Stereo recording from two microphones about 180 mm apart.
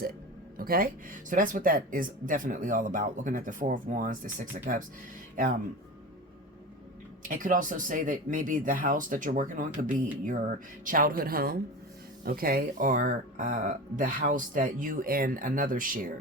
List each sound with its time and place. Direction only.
0.5 s speech: 55° right (ahead or behind)
7.2 s speech: 45° right (ahead or behind)